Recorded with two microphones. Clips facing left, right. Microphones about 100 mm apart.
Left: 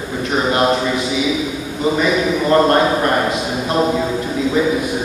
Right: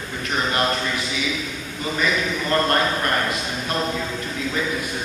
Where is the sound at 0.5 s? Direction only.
15° left (ahead or behind).